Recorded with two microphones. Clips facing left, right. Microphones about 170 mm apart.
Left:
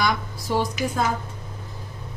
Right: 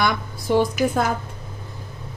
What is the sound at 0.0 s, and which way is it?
Speech, 55° right (ahead or behind).